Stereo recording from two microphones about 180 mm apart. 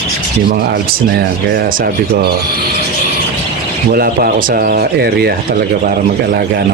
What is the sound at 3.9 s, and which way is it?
Speech, 55° right (ahead or behind).